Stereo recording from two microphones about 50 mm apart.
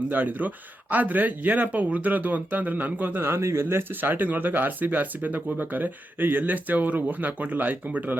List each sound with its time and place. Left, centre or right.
0.1 s speech: right